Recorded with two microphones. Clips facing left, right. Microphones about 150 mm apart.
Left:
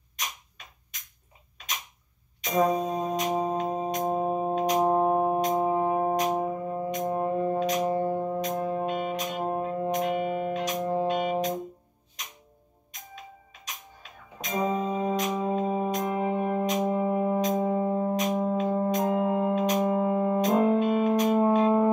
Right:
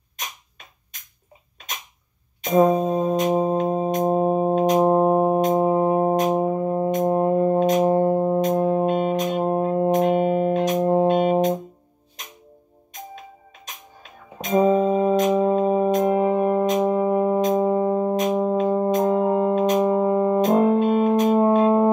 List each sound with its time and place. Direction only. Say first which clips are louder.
2.4 s music: right 7 dB; 50° right (ahead or behind)
4.7 s music: right 4 dB; 25° right (ahead or behind); by 7.2 s 45° right (ahead or behind)
7.2 s brass instrument: right 6 dB; 40° right (ahead or behind)
9.0 s music: right 8 dB; 45° right (ahead or behind)
14.7 s music: right 9 dB; 50° right (ahead or behind)
18.3 s music: right 6 dB; 40° right (ahead or behind)